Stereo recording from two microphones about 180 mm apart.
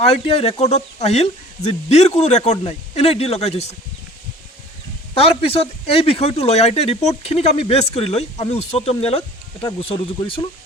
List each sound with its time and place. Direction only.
0.0 s speech: 35° left (ahead or behind)
5.1 s speech: 35° left (ahead or behind)